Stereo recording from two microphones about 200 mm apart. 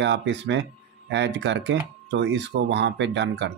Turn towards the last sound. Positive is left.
turn(degrees=-60)  # may be behind; listen again after turning